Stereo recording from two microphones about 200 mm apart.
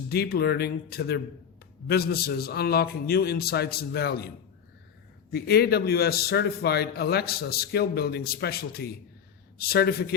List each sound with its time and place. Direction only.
0.1 s a man's voice: 50° left (ahead or behind)
5.3 s a man's voice: 50° left (ahead or behind)